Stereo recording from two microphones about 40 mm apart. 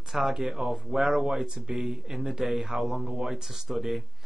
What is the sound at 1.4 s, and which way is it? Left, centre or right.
Speech, centre.